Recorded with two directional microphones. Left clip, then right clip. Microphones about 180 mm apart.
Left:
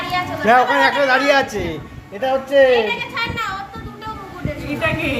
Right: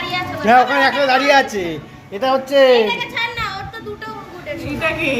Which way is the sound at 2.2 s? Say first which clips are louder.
Right 1 dB; 20° right (ahead or behind).